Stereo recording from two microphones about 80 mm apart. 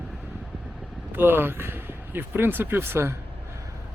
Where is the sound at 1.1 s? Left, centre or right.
Right.